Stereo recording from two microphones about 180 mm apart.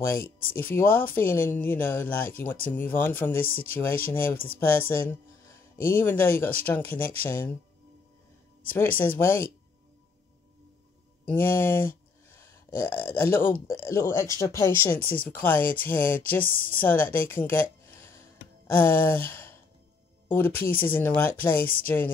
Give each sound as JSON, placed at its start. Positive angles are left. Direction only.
{"t": 0.6, "sound": "speech", "side_deg": 10}
{"t": 8.6, "sound": "speech", "side_deg": 10}
{"t": 11.2, "sound": "speech", "side_deg": 10}